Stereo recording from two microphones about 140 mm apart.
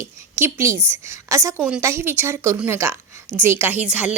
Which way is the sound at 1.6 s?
10° right (ahead or behind).